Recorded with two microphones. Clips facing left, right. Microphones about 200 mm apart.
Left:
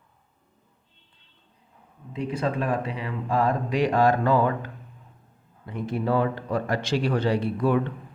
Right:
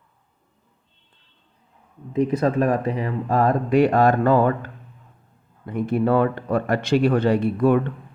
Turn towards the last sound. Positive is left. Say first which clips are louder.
# right 5 dB
turn(degrees=-55)  # may be behind; listen again after turning